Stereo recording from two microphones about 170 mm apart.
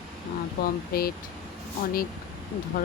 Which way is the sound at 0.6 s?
60° left (ahead or behind).